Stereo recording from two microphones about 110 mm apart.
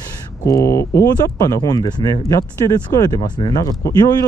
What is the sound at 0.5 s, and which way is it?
Speech, 30° left (ahead or behind).